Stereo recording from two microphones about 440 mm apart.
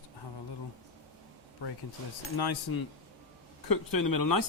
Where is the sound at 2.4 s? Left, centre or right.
Left.